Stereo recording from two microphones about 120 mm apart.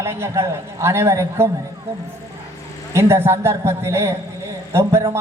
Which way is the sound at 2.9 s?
20° right (ahead or behind).